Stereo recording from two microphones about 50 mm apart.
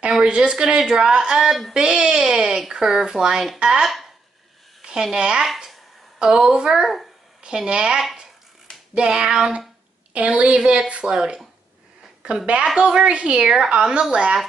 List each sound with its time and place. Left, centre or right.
0.1 s a woman's voice: centre
5.1 s a woman's voice: centre
5.4 s a sound: centre
6.1 s a woman's voice: centre
12.2 s a woman's voice: right